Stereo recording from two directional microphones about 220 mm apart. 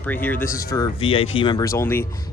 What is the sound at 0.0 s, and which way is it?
Speech, 10° left (ahead or behind).